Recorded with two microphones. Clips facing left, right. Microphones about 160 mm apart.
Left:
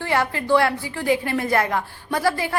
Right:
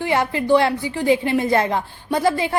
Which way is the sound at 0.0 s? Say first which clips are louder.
Right 3 dB; 20° right (ahead or behind).